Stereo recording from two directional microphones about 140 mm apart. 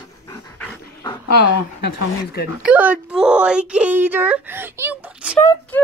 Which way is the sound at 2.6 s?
10° right (ahead or behind).